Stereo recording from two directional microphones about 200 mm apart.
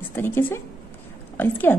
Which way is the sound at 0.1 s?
10° left (ahead or behind).